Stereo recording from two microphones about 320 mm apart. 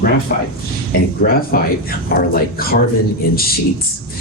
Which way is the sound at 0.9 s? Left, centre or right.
Left.